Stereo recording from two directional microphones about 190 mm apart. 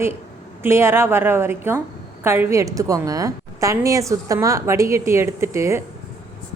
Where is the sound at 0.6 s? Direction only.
15° right (ahead or behind).